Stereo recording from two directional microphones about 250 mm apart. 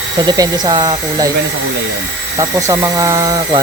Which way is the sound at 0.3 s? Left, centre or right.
Centre.